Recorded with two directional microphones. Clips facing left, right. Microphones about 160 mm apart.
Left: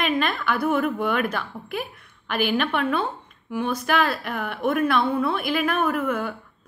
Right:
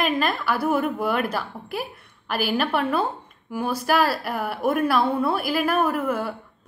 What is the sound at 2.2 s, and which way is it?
A woman's voice, 35° right (ahead or behind).